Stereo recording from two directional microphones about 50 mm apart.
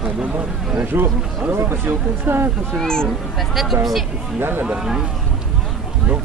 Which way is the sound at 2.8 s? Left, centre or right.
Centre.